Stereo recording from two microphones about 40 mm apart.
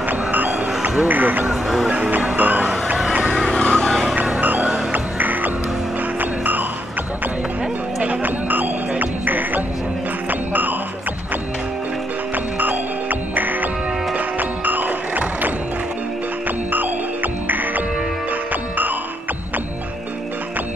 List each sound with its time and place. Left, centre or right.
0.3 s music: right
1.0 s speech: right
1.5 s speech: centre
2.0 s speech: right
2.3 s music: right
3.4 s vehicle: left
4.9 s music: right
8.0 s music: right
12.5 s music: right